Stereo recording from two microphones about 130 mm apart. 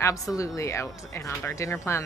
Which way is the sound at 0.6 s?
20° left (ahead or behind).